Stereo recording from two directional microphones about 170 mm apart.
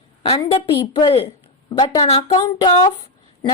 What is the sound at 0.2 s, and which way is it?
A woman's voice, 30° left (ahead or behind).